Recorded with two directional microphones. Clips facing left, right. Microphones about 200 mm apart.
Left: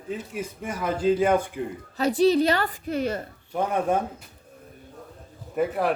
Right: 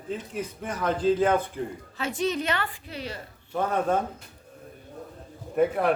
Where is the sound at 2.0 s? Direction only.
35° left (ahead or behind).